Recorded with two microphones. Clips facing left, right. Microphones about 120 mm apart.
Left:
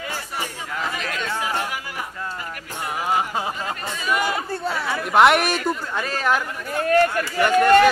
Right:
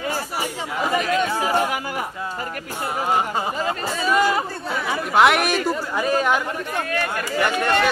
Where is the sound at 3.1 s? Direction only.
Centre (ahead or behind).